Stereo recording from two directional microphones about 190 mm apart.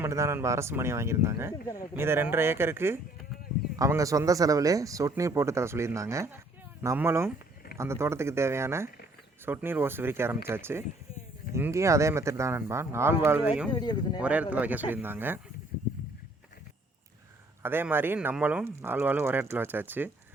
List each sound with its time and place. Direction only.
0.0 s speech: 15° right (ahead or behind)
1.6 s speech: 15° left (ahead or behind)
2.0 s speech: 10° right (ahead or behind)
13.7 s speech: 25° left (ahead or behind)
14.2 s speech: 5° right (ahead or behind)
17.6 s speech: 10° right (ahead or behind)